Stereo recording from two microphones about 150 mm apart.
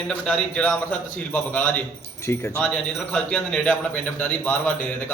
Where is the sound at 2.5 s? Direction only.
5° left (ahead or behind).